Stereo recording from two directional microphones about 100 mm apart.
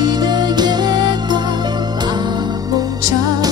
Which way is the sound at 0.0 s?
45° right (ahead or behind).